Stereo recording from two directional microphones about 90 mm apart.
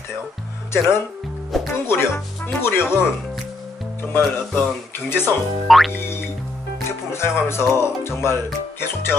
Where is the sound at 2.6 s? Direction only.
25° left (ahead or behind).